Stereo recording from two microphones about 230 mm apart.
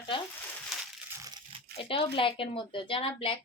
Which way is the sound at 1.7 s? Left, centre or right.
Left.